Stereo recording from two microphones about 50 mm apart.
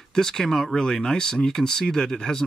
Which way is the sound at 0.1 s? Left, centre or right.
Centre.